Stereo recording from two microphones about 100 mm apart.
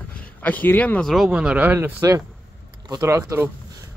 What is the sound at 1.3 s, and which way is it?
Speech, 10° right (ahead or behind).